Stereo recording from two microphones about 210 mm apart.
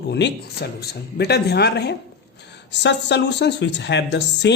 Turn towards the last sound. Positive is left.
turn(degrees=55)  # may be behind; listen again after turning